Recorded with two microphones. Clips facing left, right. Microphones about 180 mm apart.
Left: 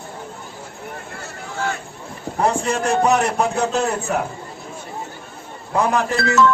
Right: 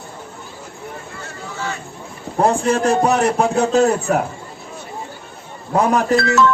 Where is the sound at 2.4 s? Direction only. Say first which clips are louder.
Right 4 dB; 30° right (ahead or behind).